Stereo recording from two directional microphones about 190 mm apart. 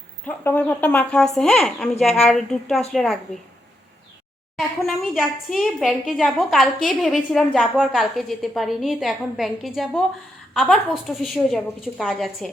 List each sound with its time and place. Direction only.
0.3 s a woman's voice: 10° left (ahead or behind)
4.5 s a woman's voice: centre (ahead or behind)